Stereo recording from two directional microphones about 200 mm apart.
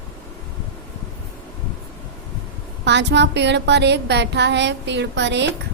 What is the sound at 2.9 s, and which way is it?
A woman's voice, 60° right (ahead or behind).